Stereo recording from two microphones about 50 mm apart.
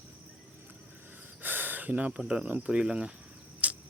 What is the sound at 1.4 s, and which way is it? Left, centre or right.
Gasp, right.